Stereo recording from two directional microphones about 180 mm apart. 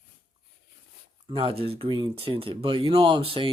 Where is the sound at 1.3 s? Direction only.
30° right (ahead or behind).